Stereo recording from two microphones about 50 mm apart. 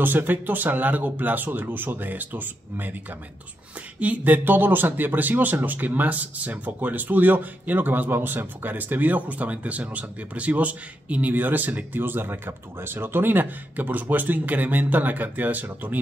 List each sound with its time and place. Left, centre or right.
0.0 s speech: right
4.0 s speech: right